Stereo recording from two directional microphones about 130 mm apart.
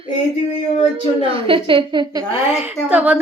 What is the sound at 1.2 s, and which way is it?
Speech, 40° right (ahead or behind).